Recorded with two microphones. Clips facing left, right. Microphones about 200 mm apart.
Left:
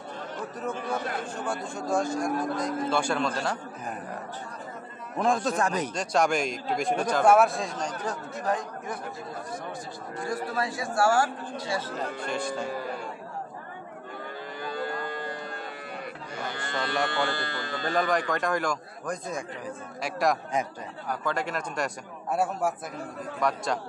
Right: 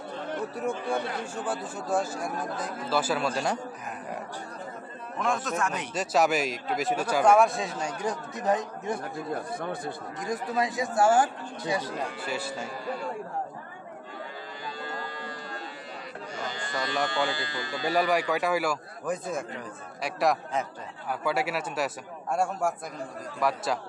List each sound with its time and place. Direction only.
0.6 s speech: 10° right (ahead or behind)
5.2 s speech: 35° left (ahead or behind)
5.9 s a man's voice: 5° right (ahead or behind); by 9.0 s 25° right (ahead or behind)
9.3 s speech: 60° right (ahead or behind)
10.2 s a man's voice: 15° right (ahead or behind)
14.6 s cattle: 55° left (ahead or behind)
16.3 s speech: 60° left (ahead or behind)
17.8 s a man's voice: 10° right (ahead or behind)